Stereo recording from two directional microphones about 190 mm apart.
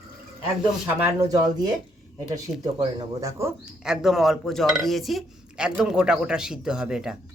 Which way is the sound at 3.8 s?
Centre (ahead or behind).